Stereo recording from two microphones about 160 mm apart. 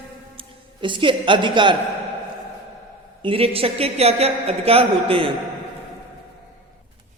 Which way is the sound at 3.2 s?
35° right (ahead or behind).